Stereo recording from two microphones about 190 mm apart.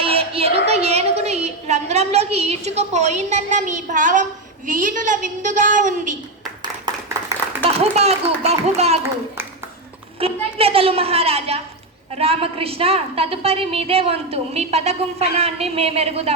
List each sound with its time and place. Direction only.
0.0 s speech: 30° right (ahead or behind)
6.6 s a sound: 20° right (ahead or behind)
7.8 s a woman's voice: 35° right (ahead or behind)
10.2 s a woman's voice: 30° right (ahead or behind)